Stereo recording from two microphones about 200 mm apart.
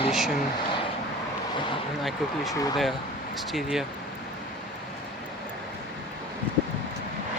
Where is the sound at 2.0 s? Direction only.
Centre (ahead or behind).